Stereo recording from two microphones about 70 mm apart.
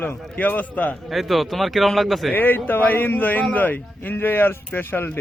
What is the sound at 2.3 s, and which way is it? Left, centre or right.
Speech, left.